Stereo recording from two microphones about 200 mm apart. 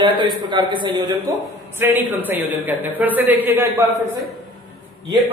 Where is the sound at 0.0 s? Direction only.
25° right (ahead or behind).